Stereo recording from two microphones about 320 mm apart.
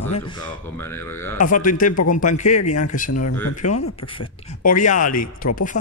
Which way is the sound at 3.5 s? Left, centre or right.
Left.